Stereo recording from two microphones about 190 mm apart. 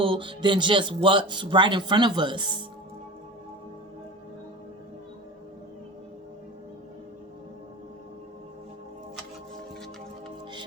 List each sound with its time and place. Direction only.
0.0 s speech: 25° right (ahead or behind)